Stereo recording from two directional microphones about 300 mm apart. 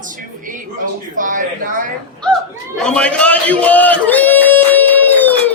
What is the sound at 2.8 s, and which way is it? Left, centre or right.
Speech, centre.